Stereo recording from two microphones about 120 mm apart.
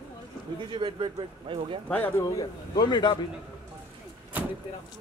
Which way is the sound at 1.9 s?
10° left (ahead or behind).